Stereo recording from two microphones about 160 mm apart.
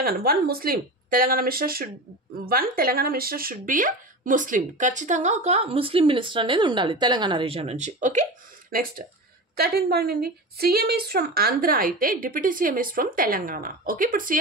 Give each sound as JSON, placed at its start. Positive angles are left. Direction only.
{"t": 0.0, "sound": "speech", "side_deg": -70}
{"t": 9.6, "sound": "a woman's voice", "side_deg": -75}